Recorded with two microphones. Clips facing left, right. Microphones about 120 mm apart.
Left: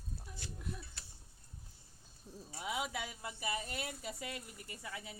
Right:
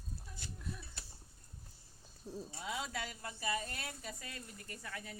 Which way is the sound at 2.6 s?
15° left (ahead or behind).